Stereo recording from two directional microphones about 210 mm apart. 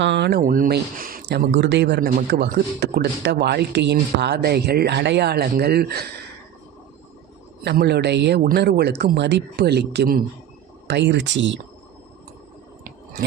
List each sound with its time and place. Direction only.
0.0 s speech: 55° right (ahead or behind)
7.6 s speech: 50° right (ahead or behind)